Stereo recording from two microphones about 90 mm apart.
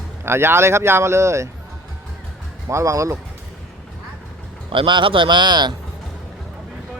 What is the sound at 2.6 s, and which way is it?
Speech, 35° right (ahead or behind).